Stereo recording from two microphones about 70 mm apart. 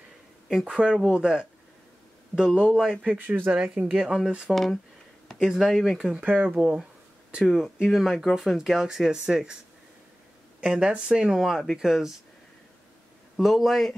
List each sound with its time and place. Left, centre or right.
0.5 s speech: centre
3.2 s speech: right
3.9 s speech: centre
5.4 s speech: centre
10.6 s speech: centre
13.4 s speech: centre